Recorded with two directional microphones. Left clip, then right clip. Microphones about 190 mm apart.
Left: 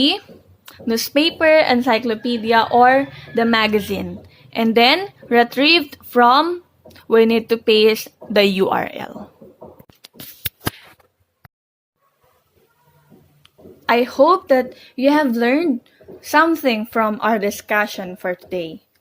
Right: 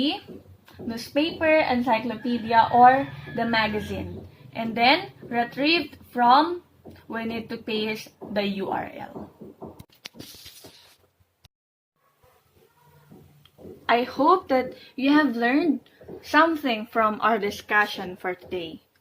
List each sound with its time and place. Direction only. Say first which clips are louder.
0.6 s a woman's voice: left 14 dB; 65° left (ahead or behind)
13.8 s a woman's voice: left 7 dB; 40° left (ahead or behind)